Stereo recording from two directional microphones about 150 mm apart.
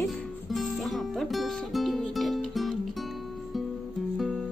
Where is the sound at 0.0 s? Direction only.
Centre (ahead or behind).